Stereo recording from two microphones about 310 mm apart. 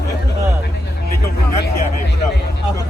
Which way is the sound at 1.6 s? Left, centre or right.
Left.